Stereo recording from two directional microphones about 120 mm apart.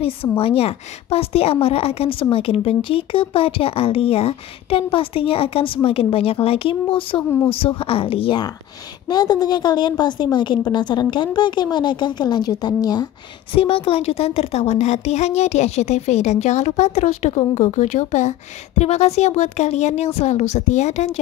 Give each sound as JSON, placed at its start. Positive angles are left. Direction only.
{"t": 0.0, "sound": "speech", "side_deg": 55}
{"t": 9.1, "sound": "a woman's voice", "side_deg": 35}
{"t": 13.6, "sound": "a woman's voice", "side_deg": 50}